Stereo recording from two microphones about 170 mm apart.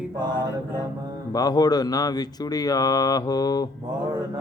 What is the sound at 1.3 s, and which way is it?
Mantra, 20° left (ahead or behind).